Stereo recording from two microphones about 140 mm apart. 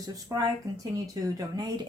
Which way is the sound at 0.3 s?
25° right (ahead or behind).